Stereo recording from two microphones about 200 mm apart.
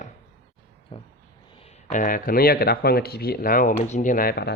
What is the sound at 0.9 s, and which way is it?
Vehicle, 25° left (ahead or behind).